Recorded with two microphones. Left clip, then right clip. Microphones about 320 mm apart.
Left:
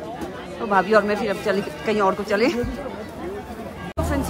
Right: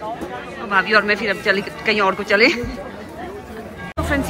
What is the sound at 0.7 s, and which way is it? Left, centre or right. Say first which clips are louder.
Speech: right 2 dB; centre.